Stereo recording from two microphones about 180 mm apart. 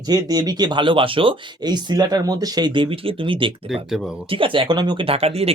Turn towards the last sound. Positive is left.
turn(degrees=-35)  # may be behind; listen again after turning